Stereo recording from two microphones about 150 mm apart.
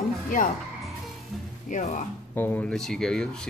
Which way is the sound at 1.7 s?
55° left (ahead or behind).